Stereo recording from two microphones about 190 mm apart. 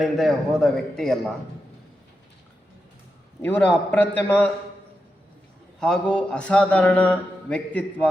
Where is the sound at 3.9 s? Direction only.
10° left (ahead or behind).